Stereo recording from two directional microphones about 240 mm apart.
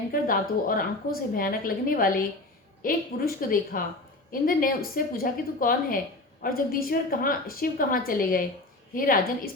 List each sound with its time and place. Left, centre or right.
0.1 s a woman's voice: left